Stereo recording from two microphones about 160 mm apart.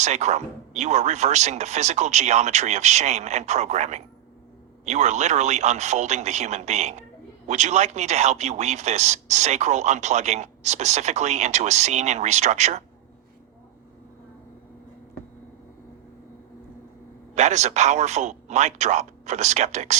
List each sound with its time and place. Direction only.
0.0 s a man's voice: 45° right (ahead or behind)
17.3 s a man's voice: 45° right (ahead or behind)